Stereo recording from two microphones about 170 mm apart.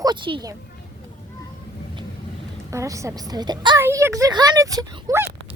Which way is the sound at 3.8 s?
15° right (ahead or behind).